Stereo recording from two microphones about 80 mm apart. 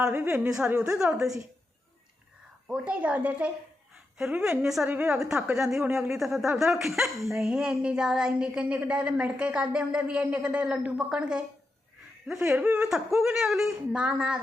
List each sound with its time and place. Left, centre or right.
0.2 s speech: centre
2.6 s speech: centre
4.4 s speech: centre